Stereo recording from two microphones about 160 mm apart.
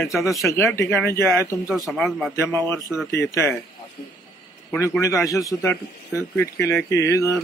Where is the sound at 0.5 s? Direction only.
15° left (ahead or behind).